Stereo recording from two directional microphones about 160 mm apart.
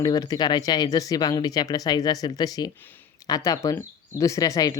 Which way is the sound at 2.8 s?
10° left (ahead or behind).